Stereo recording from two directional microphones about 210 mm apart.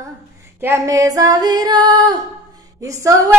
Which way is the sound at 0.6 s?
15° right (ahead or behind).